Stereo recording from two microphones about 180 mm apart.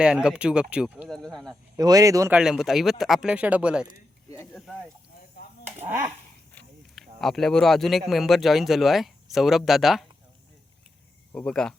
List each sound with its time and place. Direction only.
0.0 s speech: 5° right (ahead or behind)
1.7 s speech: 20° right (ahead or behind)
2.3 s speech: 5° right (ahead or behind)
6.5 s speech: 5° left (ahead or behind)
11.3 s speech: 5° left (ahead or behind)